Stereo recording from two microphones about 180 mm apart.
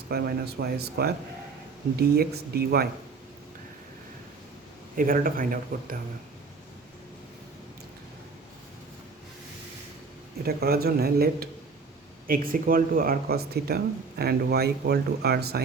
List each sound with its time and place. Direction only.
0.1 s speech: 60° right (ahead or behind)
4.9 s speech: 50° right (ahead or behind)
10.4 s speech: 60° right (ahead or behind)